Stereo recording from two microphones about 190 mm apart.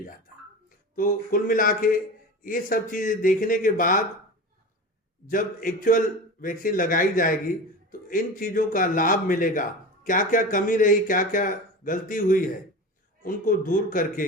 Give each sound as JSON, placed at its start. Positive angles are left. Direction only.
{"t": 0.9, "sound": "a man's voice", "side_deg": 45}
{"t": 5.2, "sound": "a man's voice", "side_deg": 45}